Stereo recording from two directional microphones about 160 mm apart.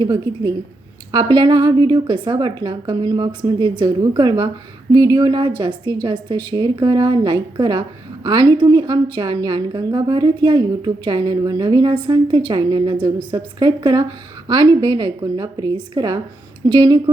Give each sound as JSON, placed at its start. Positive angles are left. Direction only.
{"t": 0.0, "sound": "a woman's voice", "side_deg": -25}